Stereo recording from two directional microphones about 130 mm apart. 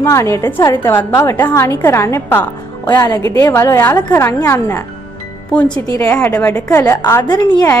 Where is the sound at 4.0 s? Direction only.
30° left (ahead or behind).